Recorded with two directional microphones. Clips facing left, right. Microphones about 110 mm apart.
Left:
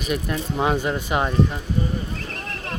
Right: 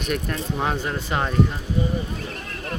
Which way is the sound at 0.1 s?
5° left (ahead or behind).